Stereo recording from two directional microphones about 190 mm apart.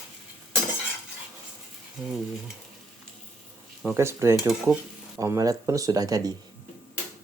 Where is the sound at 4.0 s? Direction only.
15° right (ahead or behind).